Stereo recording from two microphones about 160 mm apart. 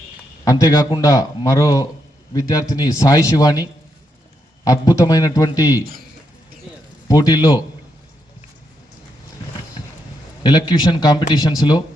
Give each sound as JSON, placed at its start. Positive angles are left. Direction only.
{"t": 0.4, "sound": "a man's voice", "side_deg": 20}
{"t": 7.1, "sound": "a man's voice", "side_deg": 25}
{"t": 10.4, "sound": "a man's voice", "side_deg": 30}